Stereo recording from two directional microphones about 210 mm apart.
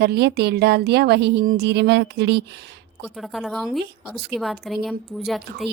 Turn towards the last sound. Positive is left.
turn(degrees=0)  # may be behind; listen again after turning